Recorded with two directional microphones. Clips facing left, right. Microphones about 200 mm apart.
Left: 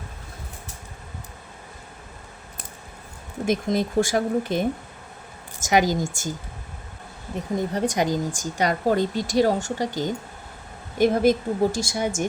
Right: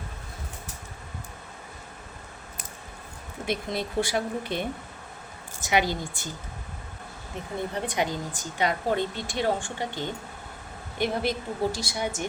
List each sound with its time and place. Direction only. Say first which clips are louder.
3.4 s a woman's voice: left 7 dB; 45° left (ahead or behind)
5.6 s a woman's voice: left 5 dB; 40° left (ahead or behind)
7.7 s a woman's voice: left 5 dB; 40° left (ahead or behind)